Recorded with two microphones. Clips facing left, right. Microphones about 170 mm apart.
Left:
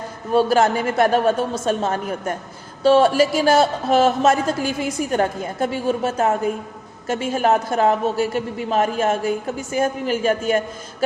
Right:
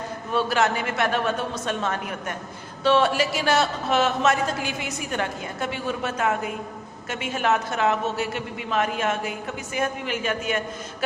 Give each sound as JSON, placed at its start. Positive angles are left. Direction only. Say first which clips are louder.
{"t": 0.3, "sound": "a man's voice", "louder": "left 6 dB", "side_deg": 45}